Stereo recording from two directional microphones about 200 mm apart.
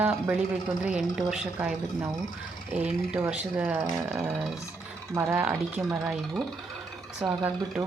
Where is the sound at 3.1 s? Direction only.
5° right (ahead or behind).